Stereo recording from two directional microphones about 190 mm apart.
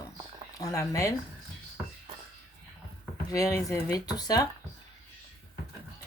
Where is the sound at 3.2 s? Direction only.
15° left (ahead or behind).